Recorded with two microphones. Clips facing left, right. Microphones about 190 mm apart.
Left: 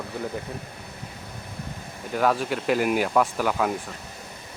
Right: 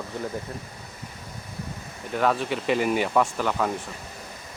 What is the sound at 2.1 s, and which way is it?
Speech, 5° left (ahead or behind).